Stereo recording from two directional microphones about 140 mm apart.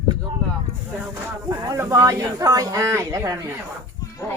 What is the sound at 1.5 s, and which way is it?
Speech, 25° right (ahead or behind).